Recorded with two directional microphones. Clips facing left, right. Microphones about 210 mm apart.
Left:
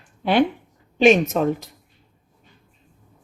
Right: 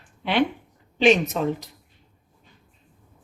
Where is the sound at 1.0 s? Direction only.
50° left (ahead or behind).